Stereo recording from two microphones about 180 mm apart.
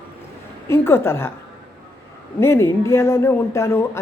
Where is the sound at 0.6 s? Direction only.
15° left (ahead or behind).